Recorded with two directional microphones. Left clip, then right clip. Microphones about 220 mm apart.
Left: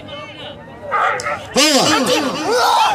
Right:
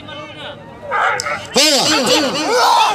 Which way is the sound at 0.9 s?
Centre (ahead or behind).